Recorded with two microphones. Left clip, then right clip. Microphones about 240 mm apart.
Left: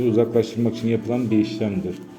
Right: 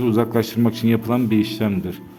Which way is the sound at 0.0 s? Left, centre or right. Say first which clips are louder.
Left 1 dB; right.